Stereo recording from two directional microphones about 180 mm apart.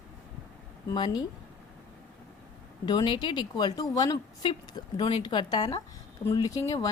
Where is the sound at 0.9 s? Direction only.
25° left (ahead or behind).